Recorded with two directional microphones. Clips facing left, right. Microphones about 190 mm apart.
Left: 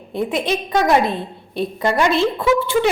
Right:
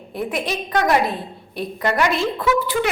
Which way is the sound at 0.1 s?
25° left (ahead or behind).